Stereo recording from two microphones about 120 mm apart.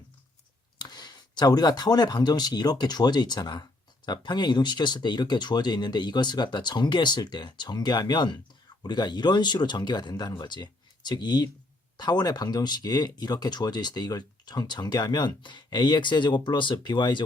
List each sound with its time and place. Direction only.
0.8 s speech: 35° left (ahead or behind)